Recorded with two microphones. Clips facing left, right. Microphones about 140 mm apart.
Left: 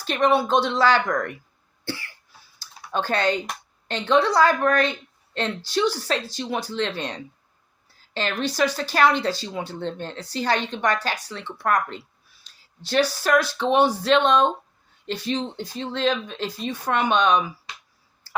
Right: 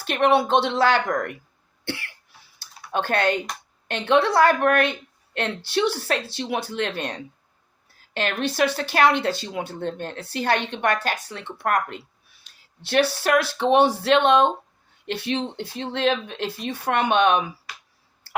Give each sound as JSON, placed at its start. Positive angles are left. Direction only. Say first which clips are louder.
{"t": 0.0, "sound": "speech", "louder": "right 1 dB", "side_deg": -60}
{"t": 1.8, "sound": "cough", "louder": "right 1 dB", "side_deg": -65}
{"t": 2.6, "sound": "typing", "louder": "right 1 dB", "side_deg": -60}
{"t": 3.8, "sound": "a woman's voice", "louder": "even", "side_deg": -60}
{"t": 12.4, "sound": "a sound", "louder": "left 3 dB", "side_deg": -60}
{"t": 13.1, "sound": "speech", "louder": "even", "side_deg": -60}
{"t": 18.3, "sound": "clicking", "louder": "right 1 dB", "side_deg": -60}